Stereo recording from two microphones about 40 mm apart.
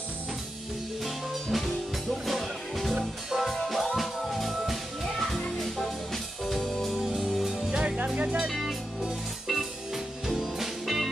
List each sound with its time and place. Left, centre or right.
1.0 s music: centre
3.0 s music: centre
3.4 s music: centre
7.2 s music: centre
7.7 s music: right
8.2 s music: right
8.5 s music: centre